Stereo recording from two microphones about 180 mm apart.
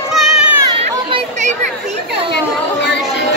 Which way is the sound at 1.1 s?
40° right (ahead or behind).